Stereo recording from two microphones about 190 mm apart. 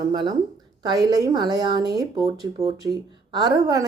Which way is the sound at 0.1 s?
20° right (ahead or behind).